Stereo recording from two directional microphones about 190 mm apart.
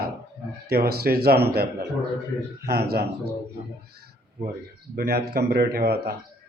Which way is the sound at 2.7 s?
55° right (ahead or behind).